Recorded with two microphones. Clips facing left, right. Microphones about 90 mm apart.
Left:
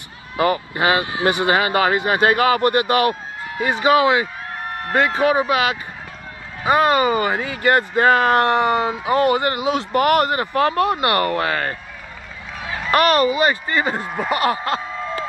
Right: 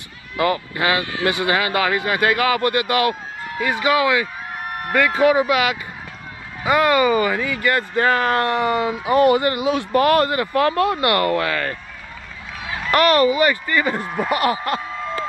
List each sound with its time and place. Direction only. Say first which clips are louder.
0.4 s speech: left 1 dB; 25° left (ahead or behind)
12.9 s speech: right 1 dB; 20° left (ahead or behind)